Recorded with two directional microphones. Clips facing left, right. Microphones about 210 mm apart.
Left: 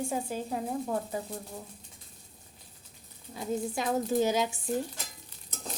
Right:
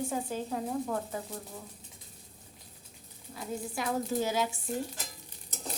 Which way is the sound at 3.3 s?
20° left (ahead or behind).